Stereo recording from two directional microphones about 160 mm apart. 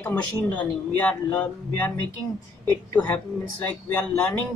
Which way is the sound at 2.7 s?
25° left (ahead or behind).